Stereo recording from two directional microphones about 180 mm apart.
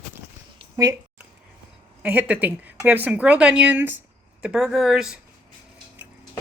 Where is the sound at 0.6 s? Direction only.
20° right (ahead or behind).